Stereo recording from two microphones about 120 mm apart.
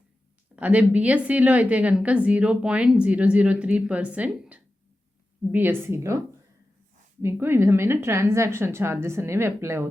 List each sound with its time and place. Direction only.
0.5 s a woman's voice: 10° right (ahead or behind)